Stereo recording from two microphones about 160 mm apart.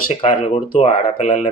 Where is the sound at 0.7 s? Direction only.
45° left (ahead or behind).